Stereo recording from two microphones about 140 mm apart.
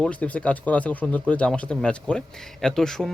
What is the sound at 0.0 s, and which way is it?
Speech, 10° left (ahead or behind).